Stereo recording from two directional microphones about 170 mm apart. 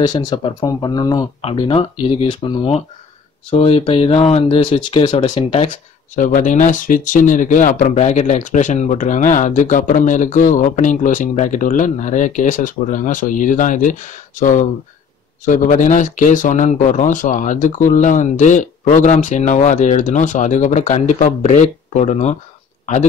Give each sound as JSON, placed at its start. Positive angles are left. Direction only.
{"t": 0.0, "sound": "speech", "side_deg": 25}
{"t": 5.1, "sound": "speech", "side_deg": 40}